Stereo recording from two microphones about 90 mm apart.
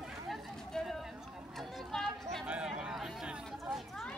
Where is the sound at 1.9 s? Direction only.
5° left (ahead or behind).